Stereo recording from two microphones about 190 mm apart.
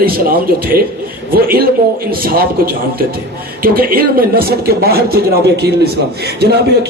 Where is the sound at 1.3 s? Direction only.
55° right (ahead or behind).